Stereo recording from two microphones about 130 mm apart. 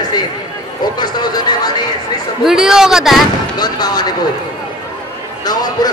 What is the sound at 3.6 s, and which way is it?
Speech, 30° left (ahead or behind).